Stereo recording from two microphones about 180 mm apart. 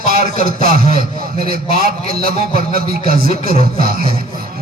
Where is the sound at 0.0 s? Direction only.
55° right (ahead or behind).